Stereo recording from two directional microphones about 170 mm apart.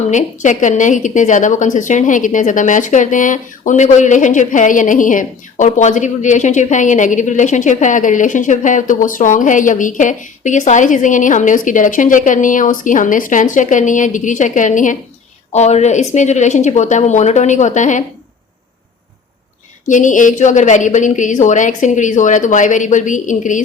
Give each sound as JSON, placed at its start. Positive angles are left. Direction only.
{"t": 0.1, "sound": "a woman's voice", "side_deg": 45}
{"t": 19.9, "sound": "a woman's voice", "side_deg": 50}